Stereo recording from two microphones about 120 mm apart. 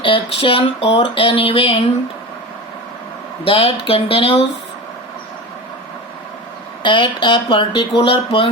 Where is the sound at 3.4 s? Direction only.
50° left (ahead or behind).